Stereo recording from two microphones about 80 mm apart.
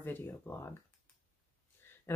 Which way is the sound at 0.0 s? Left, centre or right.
Left.